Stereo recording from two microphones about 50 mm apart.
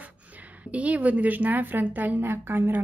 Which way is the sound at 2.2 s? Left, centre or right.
Right.